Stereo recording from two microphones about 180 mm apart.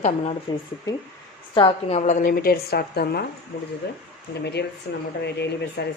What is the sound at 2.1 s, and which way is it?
A woman's voice, 50° left (ahead or behind).